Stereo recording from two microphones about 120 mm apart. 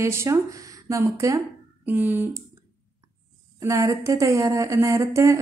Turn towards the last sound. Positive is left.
turn(degrees=-25)  # may be behind; listen again after turning